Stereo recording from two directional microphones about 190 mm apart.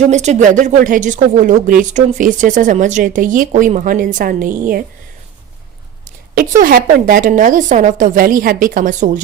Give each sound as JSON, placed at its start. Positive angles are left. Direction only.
{"t": 0.0, "sound": "speech", "side_deg": -40}
{"t": 6.3, "sound": "speech", "side_deg": -45}